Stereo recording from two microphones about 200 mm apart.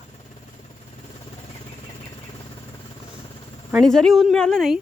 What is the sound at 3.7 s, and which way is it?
A woman's voice, centre (ahead or behind).